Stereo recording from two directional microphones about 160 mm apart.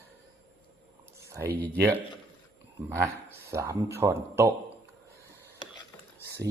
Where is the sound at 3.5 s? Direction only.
20° right (ahead or behind).